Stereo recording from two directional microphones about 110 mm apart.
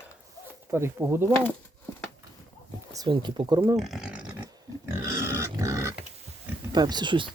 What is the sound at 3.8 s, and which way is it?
Speech, 5° right (ahead or behind).